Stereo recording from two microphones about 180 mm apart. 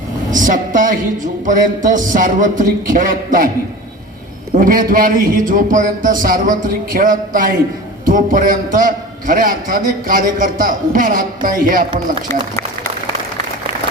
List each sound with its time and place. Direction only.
0.3 s a man's voice: 45° right (ahead or behind)
4.5 s a man's voice: 50° right (ahead or behind)
12.3 s a man's voice: 15° left (ahead or behind)